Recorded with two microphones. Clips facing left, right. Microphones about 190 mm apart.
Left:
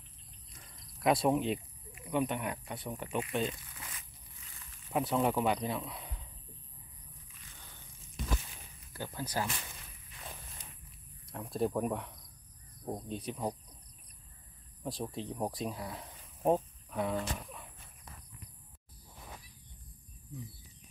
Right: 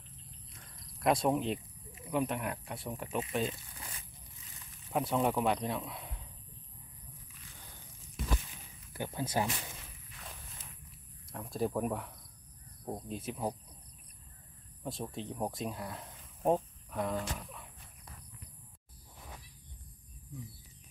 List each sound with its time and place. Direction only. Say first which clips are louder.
0.6 s a sound: even; 5° left (ahead or behind)
2.0 s speech: even; centre (ahead or behind)
3.5 s a sound: right 1 dB; 35° right (ahead or behind)
4.9 s speech: even; centre (ahead or behind)
8.9 s speech: right 3 dB; 20° right (ahead or behind)
11.3 s speech: left 1 dB; centre (ahead or behind)
14.8 s speech: left 1 dB; centre (ahead or behind)